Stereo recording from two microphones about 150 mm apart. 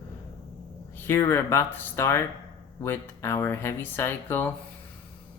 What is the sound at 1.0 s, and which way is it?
Speech, 15° left (ahead or behind).